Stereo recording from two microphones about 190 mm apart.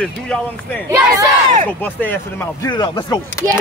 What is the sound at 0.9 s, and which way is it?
Speech, 20° right (ahead or behind).